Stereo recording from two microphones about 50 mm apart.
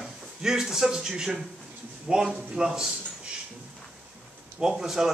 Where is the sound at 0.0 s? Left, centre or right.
Centre.